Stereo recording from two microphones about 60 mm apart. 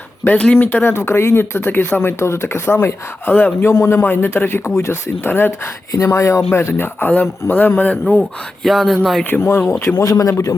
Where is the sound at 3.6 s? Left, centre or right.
Left.